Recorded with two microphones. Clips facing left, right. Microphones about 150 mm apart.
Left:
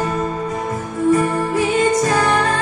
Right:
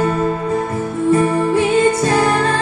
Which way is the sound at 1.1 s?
30° right (ahead or behind).